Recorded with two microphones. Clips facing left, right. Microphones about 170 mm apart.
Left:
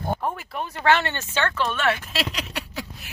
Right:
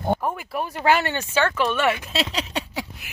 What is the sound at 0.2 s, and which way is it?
Speech, 10° right (ahead or behind).